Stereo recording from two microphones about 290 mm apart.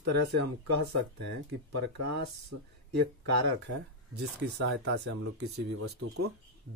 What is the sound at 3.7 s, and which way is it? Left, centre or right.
Speech, right.